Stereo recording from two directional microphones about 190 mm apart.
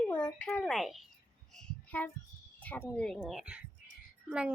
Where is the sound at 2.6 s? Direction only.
10° left (ahead or behind).